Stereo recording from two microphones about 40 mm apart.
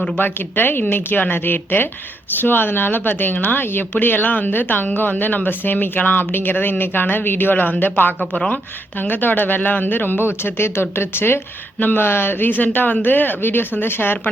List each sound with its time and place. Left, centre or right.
0.2 s speech: left
10.2 s speech: left
11.8 s speech: left
12.0 s speech: left